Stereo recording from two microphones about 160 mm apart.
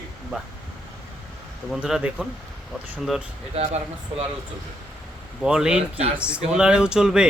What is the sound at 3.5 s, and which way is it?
Speech, 45° right (ahead or behind).